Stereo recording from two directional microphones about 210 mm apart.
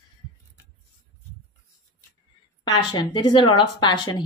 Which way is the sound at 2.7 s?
20° left (ahead or behind).